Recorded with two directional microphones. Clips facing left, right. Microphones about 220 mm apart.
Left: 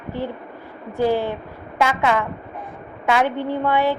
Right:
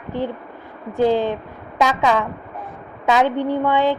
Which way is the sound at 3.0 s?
20° right (ahead or behind).